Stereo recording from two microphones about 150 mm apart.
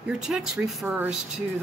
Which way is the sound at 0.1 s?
5° right (ahead or behind).